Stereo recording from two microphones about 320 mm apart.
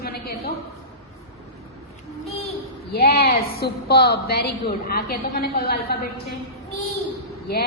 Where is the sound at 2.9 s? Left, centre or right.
Left.